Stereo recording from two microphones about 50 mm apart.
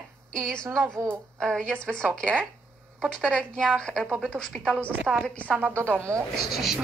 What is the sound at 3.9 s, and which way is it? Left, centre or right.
Speech, centre.